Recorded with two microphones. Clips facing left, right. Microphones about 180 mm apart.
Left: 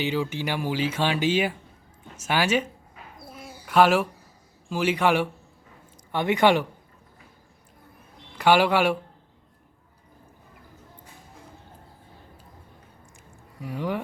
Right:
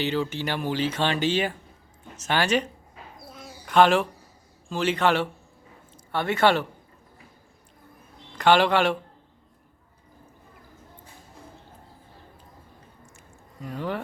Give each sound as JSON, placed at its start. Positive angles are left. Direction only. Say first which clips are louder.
{"t": 0.0, "sound": "speech", "louder": "even", "side_deg": 10}
{"t": 3.3, "sound": "a sound", "louder": "right 1 dB", "side_deg": 5}
{"t": 4.7, "sound": "speech", "louder": "left 1 dB", "side_deg": 10}
{"t": 8.4, "sound": "speech", "louder": "even", "side_deg": 10}
{"t": 13.6, "sound": "speech", "louder": "left 2 dB", "side_deg": 10}